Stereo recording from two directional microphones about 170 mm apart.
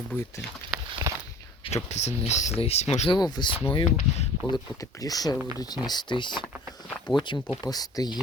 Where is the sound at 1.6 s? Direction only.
40° left (ahead or behind).